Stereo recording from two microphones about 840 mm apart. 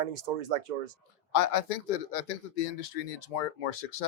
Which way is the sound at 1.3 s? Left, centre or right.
Left.